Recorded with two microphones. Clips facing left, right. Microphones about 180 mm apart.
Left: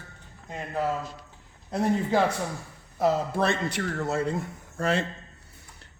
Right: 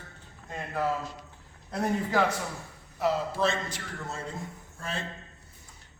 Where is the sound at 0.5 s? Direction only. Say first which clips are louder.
Left 2 dB; 15° left (ahead or behind).